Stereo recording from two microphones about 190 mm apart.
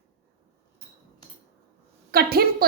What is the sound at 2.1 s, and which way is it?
Speech, 55° right (ahead or behind).